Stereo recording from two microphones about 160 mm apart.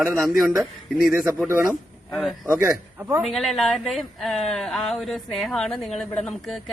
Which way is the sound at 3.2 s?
Centre (ahead or behind).